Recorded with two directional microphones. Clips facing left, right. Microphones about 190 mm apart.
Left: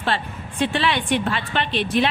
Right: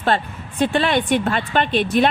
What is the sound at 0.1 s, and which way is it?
A woman's voice, 45° right (ahead or behind).